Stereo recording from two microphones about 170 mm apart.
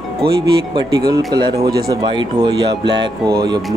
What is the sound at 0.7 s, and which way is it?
Speech, 25° right (ahead or behind).